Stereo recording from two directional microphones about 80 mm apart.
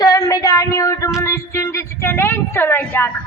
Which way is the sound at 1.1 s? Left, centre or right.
Left.